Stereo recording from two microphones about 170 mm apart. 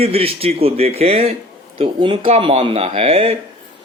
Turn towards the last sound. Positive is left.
turn(degrees=-35)  # may be behind; listen again after turning